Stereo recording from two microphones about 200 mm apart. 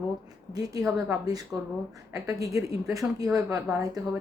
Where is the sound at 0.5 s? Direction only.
15° right (ahead or behind).